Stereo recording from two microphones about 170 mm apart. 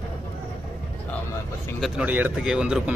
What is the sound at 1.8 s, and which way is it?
A man's voice, 10° right (ahead or behind).